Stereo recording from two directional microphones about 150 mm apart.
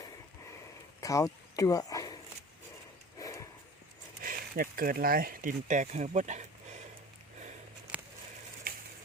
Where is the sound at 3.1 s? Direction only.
20° left (ahead or behind).